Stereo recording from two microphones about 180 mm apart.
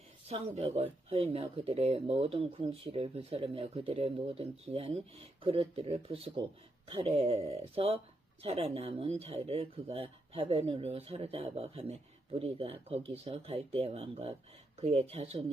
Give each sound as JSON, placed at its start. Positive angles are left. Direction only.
{"t": 0.3, "sound": "speech", "side_deg": -35}